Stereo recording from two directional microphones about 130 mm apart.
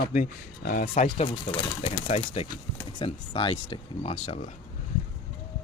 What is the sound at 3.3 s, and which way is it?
Speech, 40° left (ahead or behind).